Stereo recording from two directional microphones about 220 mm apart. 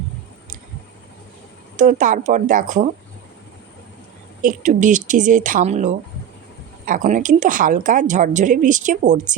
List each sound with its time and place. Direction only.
1.7 s a woman's voice: 35° right (ahead or behind)
4.4 s a woman's voice: 35° right (ahead or behind)